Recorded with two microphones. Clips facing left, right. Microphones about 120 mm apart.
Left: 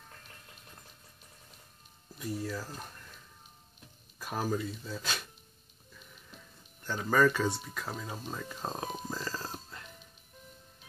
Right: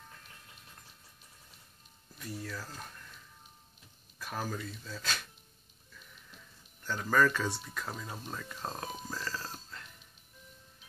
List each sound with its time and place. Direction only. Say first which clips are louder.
2.1 s speech: left 5 dB; 15° left (ahead or behind)
4.2 s speech: left 5 dB; 15° left (ahead or behind)
6.9 s speech: left 2 dB; 15° left (ahead or behind)
9.0 s music: left 2 dB; 20° left (ahead or behind)